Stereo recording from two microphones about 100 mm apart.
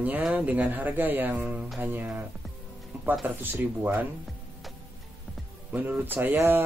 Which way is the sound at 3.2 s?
20° right (ahead or behind).